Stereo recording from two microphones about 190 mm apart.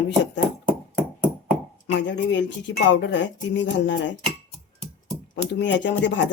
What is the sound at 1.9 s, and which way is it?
Speech, 70° left (ahead or behind).